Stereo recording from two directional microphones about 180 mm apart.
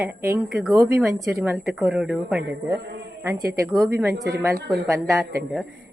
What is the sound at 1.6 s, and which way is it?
A woman's voice, centre (ahead or behind).